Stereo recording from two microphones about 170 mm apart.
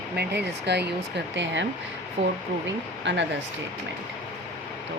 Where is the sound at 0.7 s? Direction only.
85° right.